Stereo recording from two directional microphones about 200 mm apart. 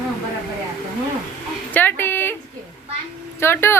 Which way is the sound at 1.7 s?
10° left (ahead or behind).